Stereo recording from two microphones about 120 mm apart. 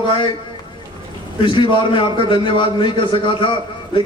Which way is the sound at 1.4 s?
45° left (ahead or behind).